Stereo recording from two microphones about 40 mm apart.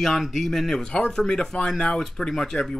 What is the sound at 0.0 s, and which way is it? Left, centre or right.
Speech, centre.